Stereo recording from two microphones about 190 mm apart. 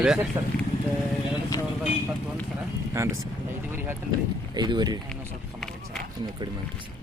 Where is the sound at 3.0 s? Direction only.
15° right (ahead or behind).